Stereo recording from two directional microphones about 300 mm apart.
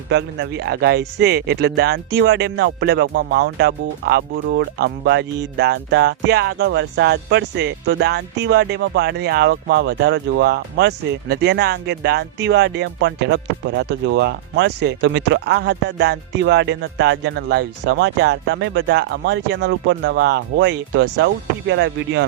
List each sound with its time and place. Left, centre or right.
0.1 s speech: right